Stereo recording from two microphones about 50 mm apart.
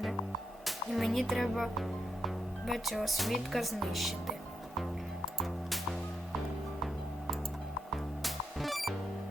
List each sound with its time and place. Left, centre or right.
0.6 s music: centre
1.3 s speech: centre
8.2 s music: centre